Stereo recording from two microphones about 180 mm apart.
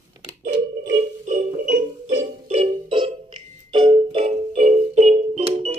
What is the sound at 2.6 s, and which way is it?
Music, 25° right (ahead or behind).